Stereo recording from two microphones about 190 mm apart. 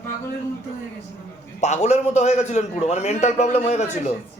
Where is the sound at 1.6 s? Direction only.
35° left (ahead or behind).